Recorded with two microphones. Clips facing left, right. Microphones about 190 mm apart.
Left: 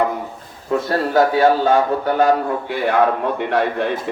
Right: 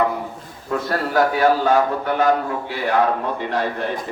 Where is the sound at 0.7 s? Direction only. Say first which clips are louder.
Left 4 dB; 25° left (ahead or behind).